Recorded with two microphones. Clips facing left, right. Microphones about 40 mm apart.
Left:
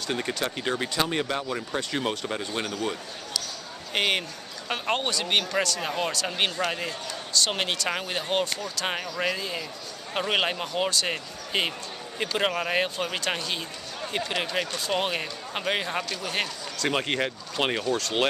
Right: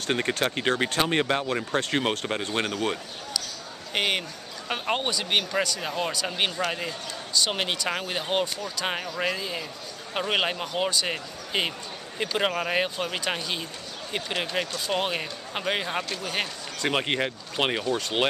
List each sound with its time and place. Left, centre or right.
0.6 s speech: right
1.7 s speech: right
2.0 s speech: right
3.9 s speech: centre
5.8 s speech: centre
9.0 s speech: centre
9.3 s speech: centre
16.8 s speech: centre